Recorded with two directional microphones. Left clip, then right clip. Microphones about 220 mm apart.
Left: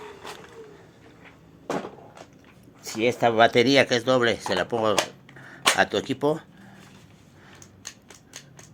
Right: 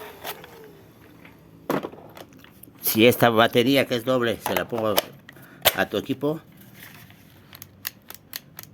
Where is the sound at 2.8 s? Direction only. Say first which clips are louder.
Right 5 dB; 50° right (ahead or behind).